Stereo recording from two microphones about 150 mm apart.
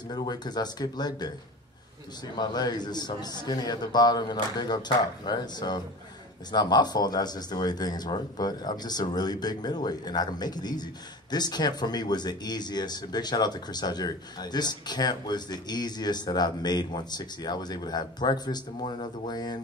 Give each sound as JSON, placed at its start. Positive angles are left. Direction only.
{"t": 0.1, "sound": "a man's voice", "side_deg": 30}
{"t": 2.3, "sound": "a man's voice", "side_deg": 25}